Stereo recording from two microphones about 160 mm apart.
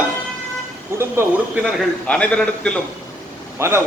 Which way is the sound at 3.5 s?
15° right (ahead or behind).